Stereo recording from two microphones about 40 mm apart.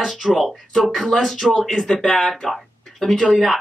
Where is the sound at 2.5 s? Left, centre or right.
Centre.